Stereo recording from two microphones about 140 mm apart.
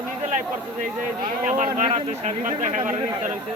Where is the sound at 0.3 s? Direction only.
65° right (ahead or behind).